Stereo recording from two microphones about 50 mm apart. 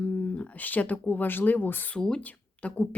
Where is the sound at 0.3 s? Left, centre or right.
Left.